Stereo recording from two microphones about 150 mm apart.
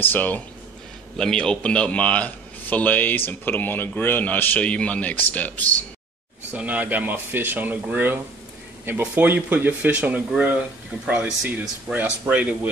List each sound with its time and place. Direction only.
0.0 s a man's voice: 10° left (ahead or behind)
6.5 s speech: 10° right (ahead or behind)